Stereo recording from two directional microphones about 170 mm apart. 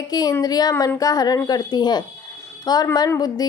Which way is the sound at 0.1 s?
20° left (ahead or behind).